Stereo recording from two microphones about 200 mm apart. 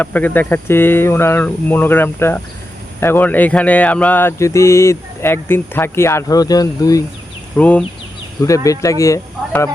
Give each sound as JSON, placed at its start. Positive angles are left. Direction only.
{"t": 0.0, "sound": "speech", "side_deg": 10}
{"t": 7.5, "sound": "speech", "side_deg": 5}